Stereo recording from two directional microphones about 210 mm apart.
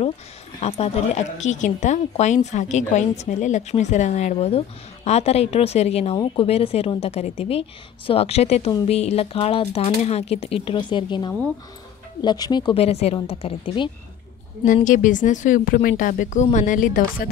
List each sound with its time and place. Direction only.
0.6 s speech: 30° left (ahead or behind)
14.9 s speech: 40° left (ahead or behind)